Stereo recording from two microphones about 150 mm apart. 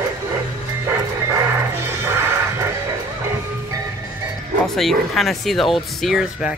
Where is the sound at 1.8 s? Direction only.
15° right (ahead or behind).